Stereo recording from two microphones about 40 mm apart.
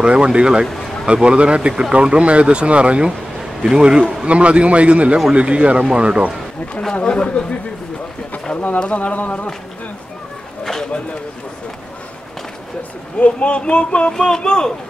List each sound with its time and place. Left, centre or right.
0.0 s speech: right
3.1 s a sound: centre
3.7 s speech: centre
4.3 s a man's voice: right
6.9 s speech: left
8.5 s speech: left
10.6 s a sound: centre
13.2 s speech: left